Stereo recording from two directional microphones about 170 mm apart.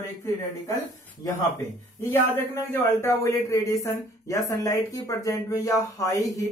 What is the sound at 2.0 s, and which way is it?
Speech, 15° left (ahead or behind).